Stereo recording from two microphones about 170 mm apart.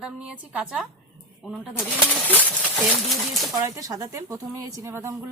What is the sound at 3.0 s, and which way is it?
Speech, centre (ahead or behind).